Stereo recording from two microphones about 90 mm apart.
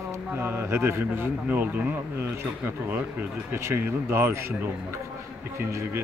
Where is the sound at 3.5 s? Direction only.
30° right (ahead or behind).